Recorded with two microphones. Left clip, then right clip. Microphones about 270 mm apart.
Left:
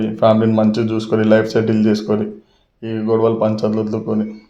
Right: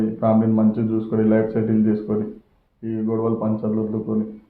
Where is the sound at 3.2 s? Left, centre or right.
Left.